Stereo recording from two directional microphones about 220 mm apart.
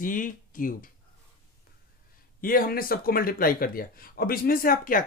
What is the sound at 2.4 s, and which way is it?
Speech, 40° left (ahead or behind).